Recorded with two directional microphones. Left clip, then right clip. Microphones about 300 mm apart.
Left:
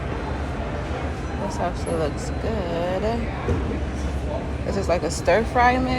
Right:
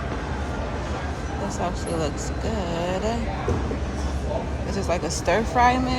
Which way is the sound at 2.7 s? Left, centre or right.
Centre.